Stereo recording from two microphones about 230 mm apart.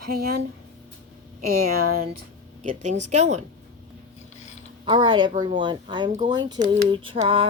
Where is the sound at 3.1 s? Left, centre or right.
Right.